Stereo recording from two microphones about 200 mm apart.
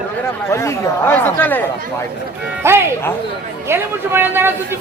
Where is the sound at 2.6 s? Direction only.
10° right (ahead or behind).